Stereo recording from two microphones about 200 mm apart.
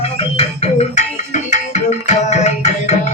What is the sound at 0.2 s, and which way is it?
Music, 30° left (ahead or behind).